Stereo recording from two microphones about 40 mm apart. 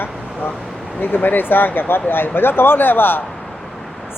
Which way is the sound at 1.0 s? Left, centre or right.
Left.